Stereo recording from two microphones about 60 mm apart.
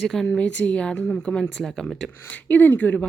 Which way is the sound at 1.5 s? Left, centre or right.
Centre.